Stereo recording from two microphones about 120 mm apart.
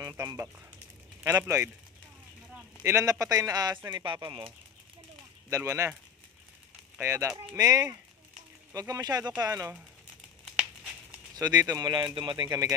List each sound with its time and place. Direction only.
0.0 s speech: 20° right (ahead or behind)
3.9 s speech: 40° right (ahead or behind)
5.5 s speech: 25° right (ahead or behind)
7.0 s speech: 25° right (ahead or behind)
10.5 s crumpling: 10° right (ahead or behind)
11.3 s speech: 30° right (ahead or behind)
12.4 s speech: 30° right (ahead or behind)